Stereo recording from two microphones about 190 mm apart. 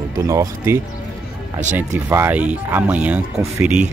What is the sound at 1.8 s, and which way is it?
Speech, 15° right (ahead or behind).